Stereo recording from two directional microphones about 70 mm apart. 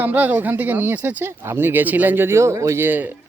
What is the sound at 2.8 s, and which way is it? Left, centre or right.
Speech, right.